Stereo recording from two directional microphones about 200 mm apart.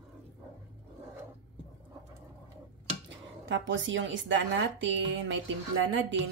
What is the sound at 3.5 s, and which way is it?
A woman's voice, 70° right (ahead or behind).